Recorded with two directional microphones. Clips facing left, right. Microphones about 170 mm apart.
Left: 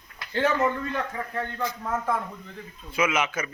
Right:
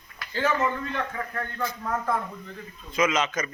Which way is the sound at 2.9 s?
10° left (ahead or behind).